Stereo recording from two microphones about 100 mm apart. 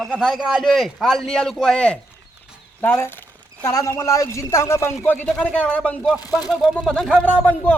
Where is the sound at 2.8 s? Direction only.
20° left (ahead or behind).